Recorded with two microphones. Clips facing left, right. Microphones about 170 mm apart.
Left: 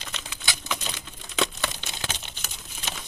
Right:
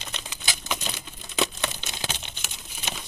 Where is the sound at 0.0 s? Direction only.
20° right (ahead or behind).